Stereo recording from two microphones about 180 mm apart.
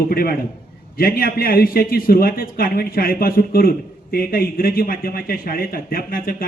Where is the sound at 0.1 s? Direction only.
55° left (ahead or behind).